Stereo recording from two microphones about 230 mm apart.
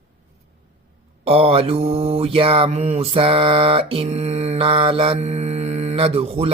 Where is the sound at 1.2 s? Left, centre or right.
Right.